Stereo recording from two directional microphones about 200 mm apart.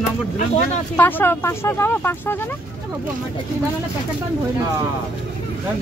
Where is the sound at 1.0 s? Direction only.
10° left (ahead or behind).